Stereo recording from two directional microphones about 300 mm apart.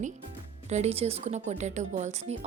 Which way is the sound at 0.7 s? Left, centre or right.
Right.